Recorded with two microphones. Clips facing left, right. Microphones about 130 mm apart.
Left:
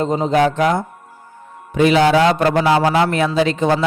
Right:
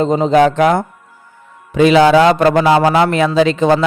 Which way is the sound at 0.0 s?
90° right.